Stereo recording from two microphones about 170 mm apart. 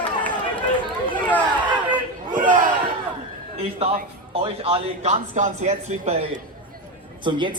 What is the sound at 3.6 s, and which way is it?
Speech, 35° right (ahead or behind).